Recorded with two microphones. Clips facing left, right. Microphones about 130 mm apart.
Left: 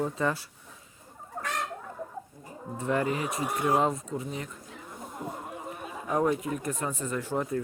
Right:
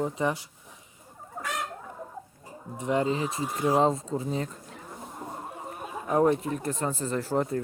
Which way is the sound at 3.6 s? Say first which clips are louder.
Right 3 dB; 30° right (ahead or behind).